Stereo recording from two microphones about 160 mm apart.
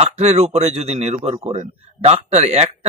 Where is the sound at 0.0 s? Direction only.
40° right (ahead or behind).